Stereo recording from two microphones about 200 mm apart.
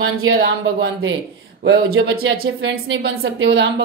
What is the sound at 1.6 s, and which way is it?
Speech, 80° right.